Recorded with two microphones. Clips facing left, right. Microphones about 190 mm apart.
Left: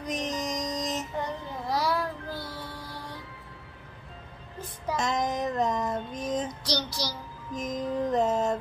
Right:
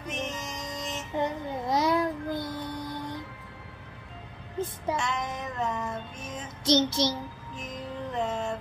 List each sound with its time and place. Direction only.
0.0 s music: 35° left (ahead or behind)
1.2 s child singing: 20° right (ahead or behind)
4.6 s music: 25° right (ahead or behind)
4.9 s female singing: 35° left (ahead or behind)
6.6 s child singing: 25° right (ahead or behind)
7.5 s music: 40° left (ahead or behind)